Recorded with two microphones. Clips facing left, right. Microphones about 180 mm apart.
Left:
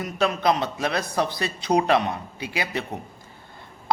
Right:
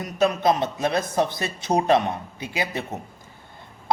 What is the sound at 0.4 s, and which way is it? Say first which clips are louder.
A man's voice: right 1 dB; 20° right (ahead or behind).